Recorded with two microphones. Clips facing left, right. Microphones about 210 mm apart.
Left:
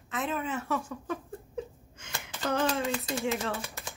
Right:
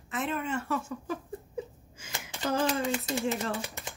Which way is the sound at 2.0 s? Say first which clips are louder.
Even; 5° right (ahead or behind).